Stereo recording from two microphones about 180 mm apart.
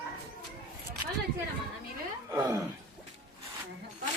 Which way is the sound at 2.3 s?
15° right (ahead or behind).